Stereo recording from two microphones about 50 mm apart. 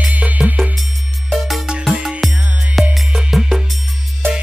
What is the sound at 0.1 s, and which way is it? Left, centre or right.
Music, right.